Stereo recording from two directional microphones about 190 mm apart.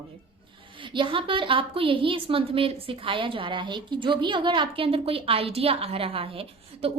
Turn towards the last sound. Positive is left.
turn(degrees=-30)  # may be behind; listen again after turning